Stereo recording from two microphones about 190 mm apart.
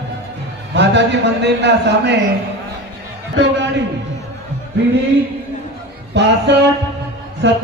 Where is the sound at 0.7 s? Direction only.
65° right (ahead or behind).